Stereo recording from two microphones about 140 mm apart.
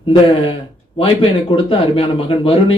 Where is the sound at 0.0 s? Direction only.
40° left (ahead or behind).